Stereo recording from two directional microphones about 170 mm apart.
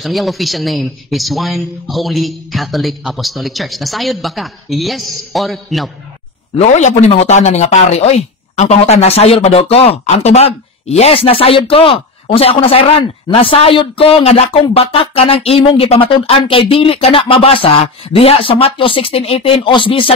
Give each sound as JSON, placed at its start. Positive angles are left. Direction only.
{"t": 0.0, "sound": "speech", "side_deg": 0}
{"t": 6.5, "sound": "speech", "side_deg": 45}